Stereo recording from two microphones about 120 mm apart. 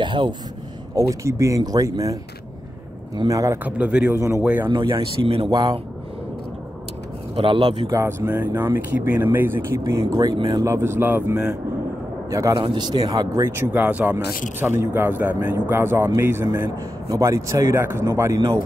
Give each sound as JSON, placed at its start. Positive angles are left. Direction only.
{"t": 0.0, "sound": "a sound", "side_deg": -40}
{"t": 0.9, "sound": "speech", "side_deg": -25}
{"t": 3.2, "sound": "speech", "side_deg": -30}
{"t": 3.6, "sound": "a man's voice", "side_deg": -10}
{"t": 4.6, "sound": "speech", "side_deg": -40}
{"t": 7.3, "sound": "speech", "side_deg": -45}
{"t": 7.9, "sound": "speech", "side_deg": -20}
{"t": 10.6, "sound": "speech", "side_deg": -25}
{"t": 12.3, "sound": "a man's voice", "side_deg": -25}
{"t": 12.5, "sound": "speech", "side_deg": -40}
{"t": 13.7, "sound": "a man's voice", "side_deg": -15}